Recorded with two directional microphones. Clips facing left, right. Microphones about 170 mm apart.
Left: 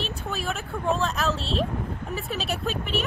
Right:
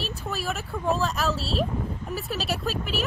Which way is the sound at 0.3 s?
Centre (ahead or behind).